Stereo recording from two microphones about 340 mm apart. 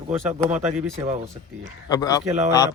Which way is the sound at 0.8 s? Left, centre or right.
Centre.